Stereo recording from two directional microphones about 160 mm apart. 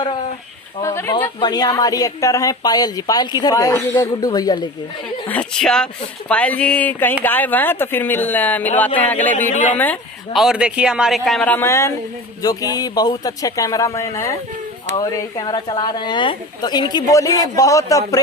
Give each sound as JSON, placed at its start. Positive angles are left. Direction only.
{"t": 0.8, "sound": "a sound", "side_deg": 15}
{"t": 1.4, "sound": "a woman's voice", "side_deg": 25}
{"t": 5.3, "sound": "speech", "side_deg": 5}
{"t": 9.5, "sound": "speech", "side_deg": 55}
{"t": 9.7, "sound": "speech", "side_deg": 10}
{"t": 10.3, "sound": "a woman's voice", "side_deg": -5}